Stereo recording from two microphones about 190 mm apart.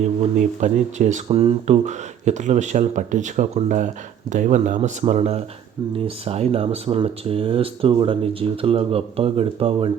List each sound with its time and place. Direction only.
0.3 s speech: 40° right (ahead or behind)